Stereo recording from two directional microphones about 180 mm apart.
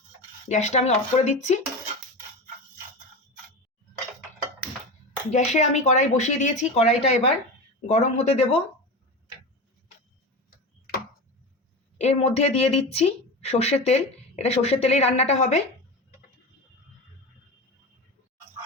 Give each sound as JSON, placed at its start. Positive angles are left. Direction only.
{"t": 0.4, "sound": "speech", "side_deg": 40}
{"t": 5.3, "sound": "speech", "side_deg": 40}
{"t": 11.9, "sound": "speech", "side_deg": 35}